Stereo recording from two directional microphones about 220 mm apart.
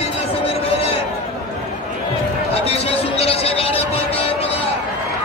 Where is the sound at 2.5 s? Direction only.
25° left (ahead or behind).